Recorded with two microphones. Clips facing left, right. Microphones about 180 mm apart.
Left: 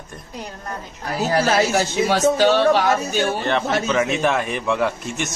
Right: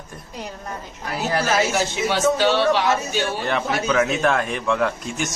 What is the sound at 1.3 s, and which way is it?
A man's voice, 40° left (ahead or behind).